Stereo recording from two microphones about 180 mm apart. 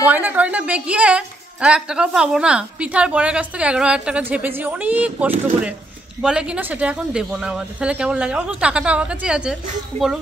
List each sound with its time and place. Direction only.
0.0 s a woman's voice: 10° right (ahead or behind)